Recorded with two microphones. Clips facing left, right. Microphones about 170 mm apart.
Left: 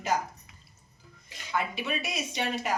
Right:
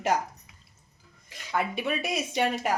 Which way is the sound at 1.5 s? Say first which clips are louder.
Right 3 dB; 50° right (ahead or behind).